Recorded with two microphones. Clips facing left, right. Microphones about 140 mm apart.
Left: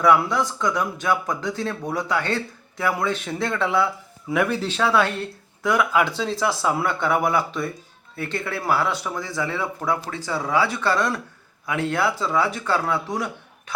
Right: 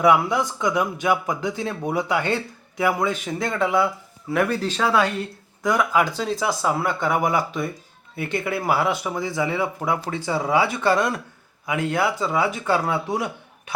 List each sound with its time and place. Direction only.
0.0 s speech: 15° right (ahead or behind)
7.3 s speech: 15° right (ahead or behind)
11.6 s a man's voice: 5° right (ahead or behind)
12.2 s speech: 10° right (ahead or behind)